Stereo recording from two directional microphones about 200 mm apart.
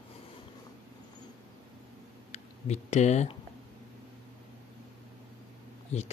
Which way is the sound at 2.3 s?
35° left (ahead or behind).